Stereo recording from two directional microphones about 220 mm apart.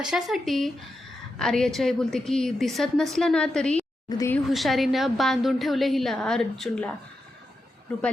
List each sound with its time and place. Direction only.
0.0 s a woman's voice: centre (ahead or behind)
4.1 s speech: 15° left (ahead or behind)
4.4 s a woman's voice: centre (ahead or behind)